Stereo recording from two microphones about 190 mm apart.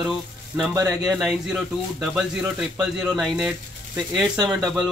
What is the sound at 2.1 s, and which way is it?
Speech, 5° right (ahead or behind).